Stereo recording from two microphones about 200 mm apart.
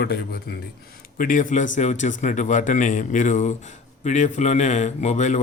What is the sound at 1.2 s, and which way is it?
A man's voice, 40° left (ahead or behind).